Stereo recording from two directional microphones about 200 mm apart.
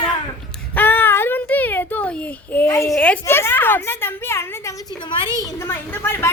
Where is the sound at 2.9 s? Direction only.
5° left (ahead or behind).